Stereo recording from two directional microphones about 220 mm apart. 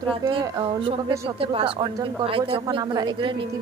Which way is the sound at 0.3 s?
20° right (ahead or behind).